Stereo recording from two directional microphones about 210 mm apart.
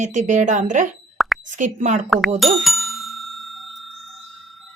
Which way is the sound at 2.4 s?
Centre (ahead or behind).